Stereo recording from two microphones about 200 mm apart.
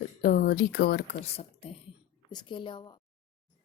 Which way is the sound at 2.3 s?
20° left (ahead or behind).